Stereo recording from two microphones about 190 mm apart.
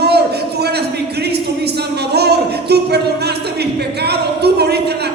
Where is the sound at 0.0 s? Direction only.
60° right (ahead or behind).